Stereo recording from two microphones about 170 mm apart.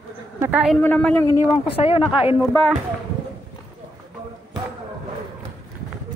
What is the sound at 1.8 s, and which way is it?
Speech, 35° left (ahead or behind).